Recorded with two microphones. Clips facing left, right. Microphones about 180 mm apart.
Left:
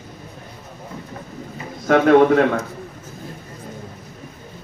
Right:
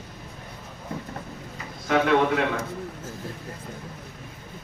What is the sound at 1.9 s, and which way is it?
Speech, 50° left (ahead or behind).